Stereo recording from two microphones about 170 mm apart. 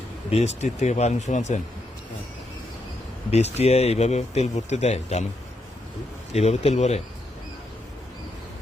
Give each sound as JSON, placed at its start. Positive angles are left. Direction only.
{"t": 0.3, "sound": "speech", "side_deg": 40}
{"t": 3.3, "sound": "speech", "side_deg": 40}
{"t": 6.3, "sound": "speech", "side_deg": 40}